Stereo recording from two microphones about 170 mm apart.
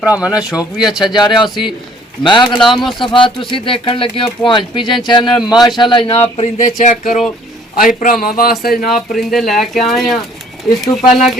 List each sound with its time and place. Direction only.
0.0 s speech: 5° right (ahead or behind)
2.2 s speech: 30° left (ahead or behind)
2.6 s speech: centre (ahead or behind)
3.0 s speech: 30° left (ahead or behind)
6.3 s speech: 45° left (ahead or behind); by 8.9 s 60° left (ahead or behind)
8.9 s speech: centre (ahead or behind)